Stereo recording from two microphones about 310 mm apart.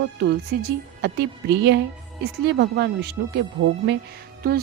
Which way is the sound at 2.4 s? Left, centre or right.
Right.